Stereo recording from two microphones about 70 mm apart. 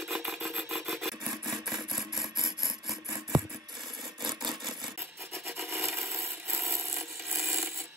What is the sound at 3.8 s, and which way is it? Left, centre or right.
Filing, right.